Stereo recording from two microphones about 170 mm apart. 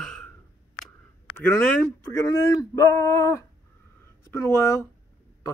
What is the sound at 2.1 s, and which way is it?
Speech, 20° left (ahead or behind).